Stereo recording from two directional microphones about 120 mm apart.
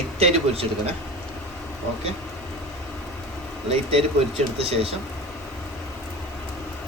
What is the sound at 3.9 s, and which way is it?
Speech, 55° right (ahead or behind).